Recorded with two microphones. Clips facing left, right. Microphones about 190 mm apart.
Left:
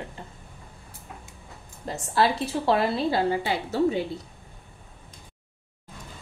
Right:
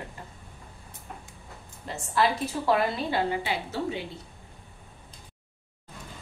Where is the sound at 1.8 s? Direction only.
35° left (ahead or behind).